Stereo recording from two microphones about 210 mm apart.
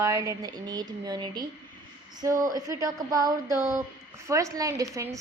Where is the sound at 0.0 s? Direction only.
15° right (ahead or behind).